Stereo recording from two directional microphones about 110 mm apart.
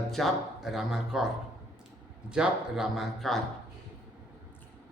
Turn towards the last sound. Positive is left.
turn(degrees=0)  # may be behind; listen again after turning